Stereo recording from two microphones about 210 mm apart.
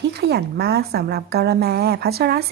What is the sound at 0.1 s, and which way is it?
A woman's voice, 55° right (ahead or behind).